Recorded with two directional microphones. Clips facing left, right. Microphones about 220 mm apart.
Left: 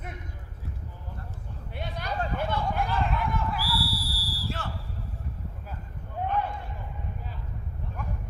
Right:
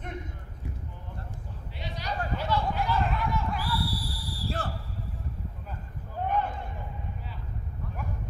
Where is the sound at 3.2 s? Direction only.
55° left (ahead or behind).